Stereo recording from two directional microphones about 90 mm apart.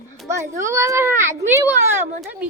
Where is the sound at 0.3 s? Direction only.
30° right (ahead or behind).